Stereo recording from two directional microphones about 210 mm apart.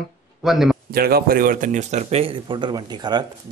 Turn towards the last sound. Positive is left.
turn(degrees=-20)  # may be behind; listen again after turning